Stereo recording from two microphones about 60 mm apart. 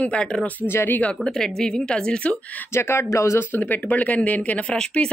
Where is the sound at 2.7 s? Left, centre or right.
Left.